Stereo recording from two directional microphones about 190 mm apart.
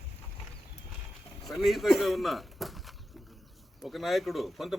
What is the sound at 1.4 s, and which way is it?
Speech, centre (ahead or behind).